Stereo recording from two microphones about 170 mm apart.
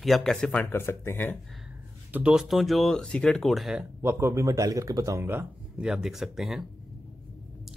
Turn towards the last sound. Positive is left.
turn(degrees=0)  # may be behind; listen again after turning